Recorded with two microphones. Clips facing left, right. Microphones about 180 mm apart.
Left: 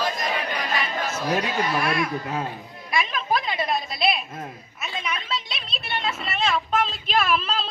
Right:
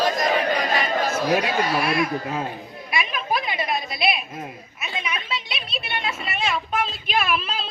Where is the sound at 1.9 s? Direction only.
25° right (ahead or behind).